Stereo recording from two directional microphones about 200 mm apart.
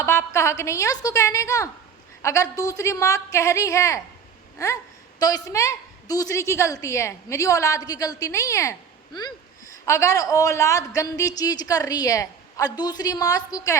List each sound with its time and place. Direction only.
0.0 s a woman's voice: 10° left (ahead or behind)
4.5 s a sound: 15° left (ahead or behind)
5.2 s a woman's voice: 15° left (ahead or behind)
9.8 s a woman's voice: 15° left (ahead or behind)